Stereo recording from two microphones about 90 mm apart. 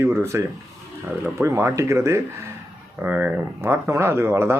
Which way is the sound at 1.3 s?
30° right (ahead or behind).